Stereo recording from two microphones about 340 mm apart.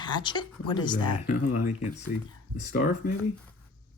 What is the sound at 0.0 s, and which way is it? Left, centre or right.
Speech, centre.